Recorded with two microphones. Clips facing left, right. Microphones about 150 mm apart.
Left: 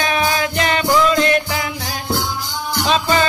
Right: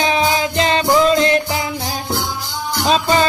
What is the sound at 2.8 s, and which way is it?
Music, 35° right (ahead or behind).